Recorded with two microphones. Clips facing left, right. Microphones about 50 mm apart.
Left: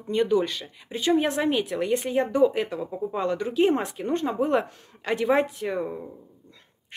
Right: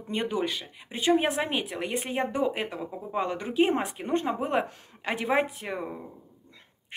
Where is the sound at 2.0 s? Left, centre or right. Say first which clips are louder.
Left 6 dB; right.